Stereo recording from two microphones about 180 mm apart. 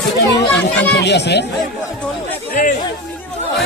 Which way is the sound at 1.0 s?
70° left (ahead or behind).